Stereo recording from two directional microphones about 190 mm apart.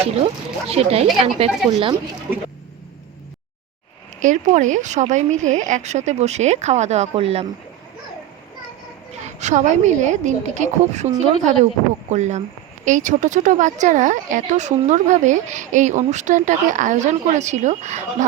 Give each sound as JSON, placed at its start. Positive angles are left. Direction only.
{"t": 0.7, "sound": "speech", "side_deg": -35}
{"t": 4.2, "sound": "speech", "side_deg": -40}
{"t": 9.2, "sound": "speech", "side_deg": -40}